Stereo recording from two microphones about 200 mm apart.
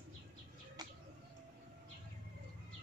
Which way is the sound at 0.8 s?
20° right (ahead or behind).